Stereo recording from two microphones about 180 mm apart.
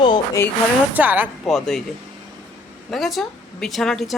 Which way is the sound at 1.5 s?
Centre (ahead or behind).